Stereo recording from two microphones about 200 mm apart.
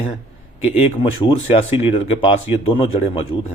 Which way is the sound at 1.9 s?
25° left (ahead or behind).